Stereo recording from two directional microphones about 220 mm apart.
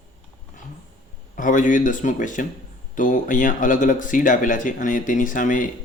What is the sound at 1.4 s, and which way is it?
Speech, 35° left (ahead or behind).